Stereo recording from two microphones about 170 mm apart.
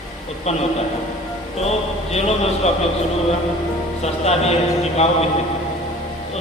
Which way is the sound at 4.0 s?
40° left (ahead or behind).